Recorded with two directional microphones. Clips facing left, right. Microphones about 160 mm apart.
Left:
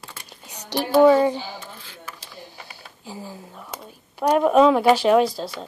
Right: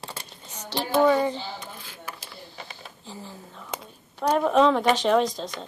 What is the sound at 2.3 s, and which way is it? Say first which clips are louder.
Speech: left 1 dB; 10° left (ahead or behind).